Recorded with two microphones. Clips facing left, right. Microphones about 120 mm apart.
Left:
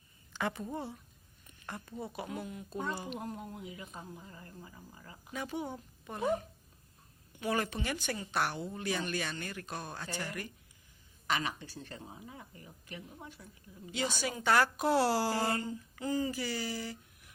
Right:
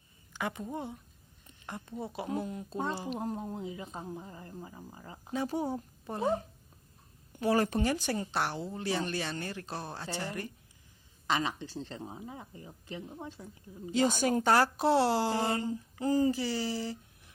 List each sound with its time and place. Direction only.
0.3 s a woman's voice: 15° right (ahead or behind)
15.6 s speech: 35° right (ahead or behind)